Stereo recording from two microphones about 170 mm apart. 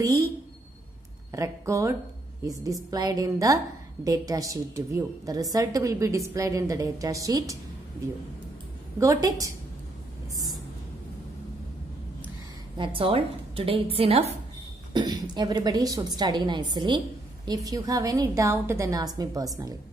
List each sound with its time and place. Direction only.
0.0 s a woman's voice: 20° right (ahead or behind)
1.3 s a woman's voice: 20° right (ahead or behind)
9.0 s a woman's voice: 20° right (ahead or behind)
12.7 s a woman's voice: 30° right (ahead or behind)